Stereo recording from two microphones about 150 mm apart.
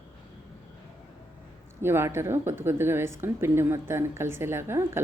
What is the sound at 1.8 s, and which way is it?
Speech, 15° right (ahead or behind).